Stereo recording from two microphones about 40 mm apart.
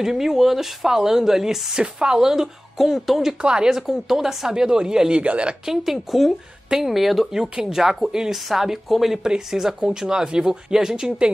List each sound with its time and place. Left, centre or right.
0.0 s a woman's voice: centre
3.4 s speech: right
3.7 s a woman's voice: centre
5.2 s a woman's voice: right
5.9 s a woman's voice: centre
11.1 s speech: right